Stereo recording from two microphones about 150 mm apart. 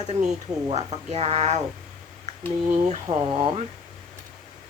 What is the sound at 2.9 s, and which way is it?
Speech, 35° right (ahead or behind).